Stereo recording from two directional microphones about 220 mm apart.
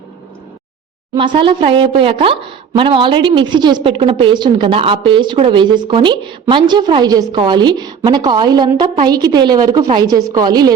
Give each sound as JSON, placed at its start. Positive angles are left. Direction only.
{"t": 1.1, "sound": "a woman's voice", "side_deg": -20}